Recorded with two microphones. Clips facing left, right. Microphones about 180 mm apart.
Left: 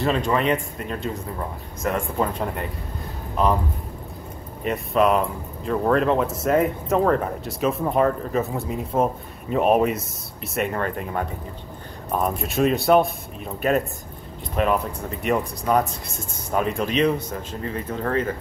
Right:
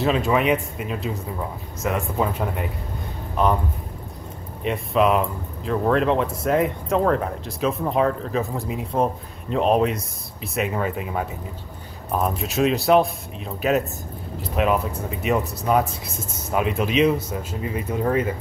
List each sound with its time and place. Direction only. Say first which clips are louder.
0.0 s speech: right 1 dB; 5° right (ahead or behind)
4.6 s speech: even; centre (ahead or behind)